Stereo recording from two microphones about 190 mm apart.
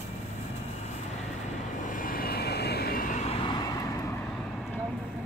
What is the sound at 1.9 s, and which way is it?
Vehicle, 45° left (ahead or behind).